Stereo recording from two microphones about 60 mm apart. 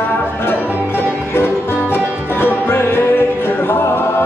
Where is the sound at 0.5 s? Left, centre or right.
Left.